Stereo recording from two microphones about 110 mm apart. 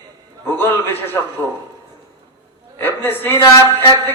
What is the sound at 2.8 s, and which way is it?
A man's voice, 20° left (ahead or behind).